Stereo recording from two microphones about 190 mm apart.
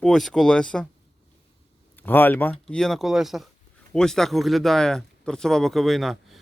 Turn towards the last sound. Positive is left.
turn(degrees=0)  # may be behind; listen again after turning